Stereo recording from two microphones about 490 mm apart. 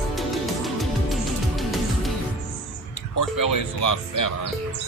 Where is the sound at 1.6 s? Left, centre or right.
Centre.